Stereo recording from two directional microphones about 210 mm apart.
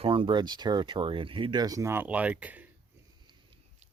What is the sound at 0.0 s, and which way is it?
Speech, 25° right (ahead or behind).